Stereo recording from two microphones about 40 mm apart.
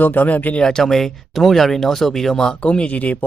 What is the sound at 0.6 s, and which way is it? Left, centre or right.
Speech, centre.